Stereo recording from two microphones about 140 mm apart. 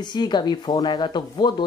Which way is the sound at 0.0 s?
30° left (ahead or behind).